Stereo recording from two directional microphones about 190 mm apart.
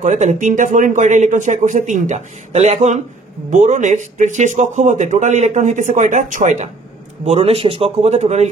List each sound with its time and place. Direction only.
0.0 s speech: 40° right (ahead or behind)